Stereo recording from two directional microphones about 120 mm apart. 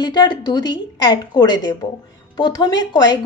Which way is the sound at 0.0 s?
35° left (ahead or behind).